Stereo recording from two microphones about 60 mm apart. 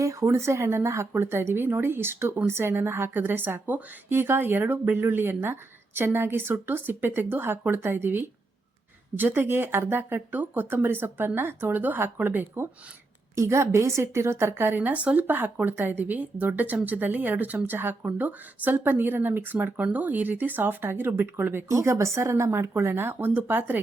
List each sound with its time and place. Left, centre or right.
0.0 s a woman's voice: right
13.3 s a woman's voice: right
21.7 s speech: right